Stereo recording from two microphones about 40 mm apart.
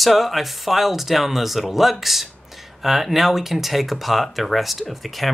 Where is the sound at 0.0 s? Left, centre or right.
Centre.